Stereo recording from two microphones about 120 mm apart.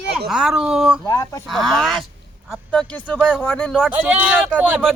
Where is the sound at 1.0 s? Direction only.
30° left (ahead or behind).